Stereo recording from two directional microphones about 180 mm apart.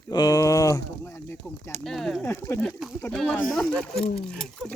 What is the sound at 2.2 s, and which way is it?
Speech, 15° left (ahead or behind).